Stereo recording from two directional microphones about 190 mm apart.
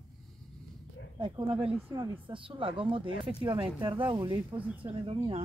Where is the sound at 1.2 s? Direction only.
25° right (ahead or behind).